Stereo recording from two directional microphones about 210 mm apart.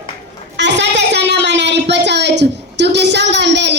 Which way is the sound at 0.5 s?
55° right (ahead or behind).